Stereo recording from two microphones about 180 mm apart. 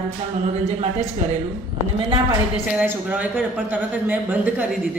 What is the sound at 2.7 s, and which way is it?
Speech, 10° right (ahead or behind).